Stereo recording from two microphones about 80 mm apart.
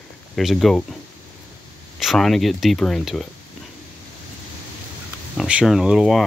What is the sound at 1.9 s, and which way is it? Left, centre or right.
Speech, centre.